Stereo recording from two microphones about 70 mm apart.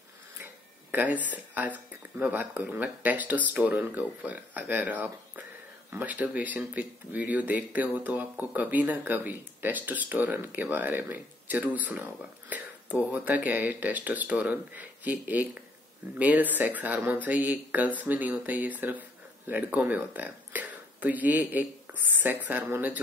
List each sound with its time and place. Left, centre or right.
0.9 s speech: right